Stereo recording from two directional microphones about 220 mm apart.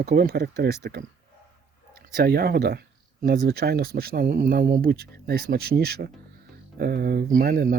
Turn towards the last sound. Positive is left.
turn(degrees=-40)  # may be behind; listen again after turning